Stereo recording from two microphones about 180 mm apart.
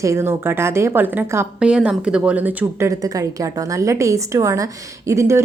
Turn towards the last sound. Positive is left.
turn(degrees=-15)  # may be behind; listen again after turning